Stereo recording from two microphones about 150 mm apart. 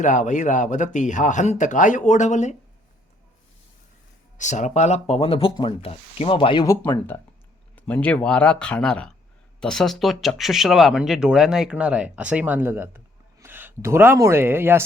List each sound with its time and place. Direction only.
0.0 s speech: 55° left (ahead or behind)
4.4 s speech: 55° left (ahead or behind); by 6.7 s 35° left (ahead or behind)
6.7 s speech: 15° left (ahead or behind); by 14.8 s 15° right (ahead or behind)